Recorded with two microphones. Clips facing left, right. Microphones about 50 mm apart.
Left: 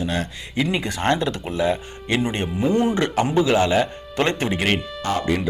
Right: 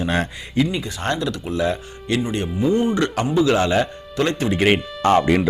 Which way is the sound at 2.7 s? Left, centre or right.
Left.